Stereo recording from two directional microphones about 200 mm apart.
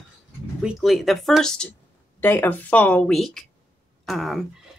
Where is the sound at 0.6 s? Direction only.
Centre (ahead or behind).